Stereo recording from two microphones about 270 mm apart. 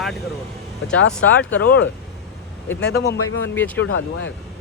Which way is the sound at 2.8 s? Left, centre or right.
Left.